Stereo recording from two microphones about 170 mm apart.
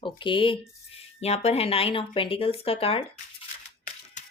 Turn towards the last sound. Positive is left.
turn(degrees=35)  # may be behind; listen again after turning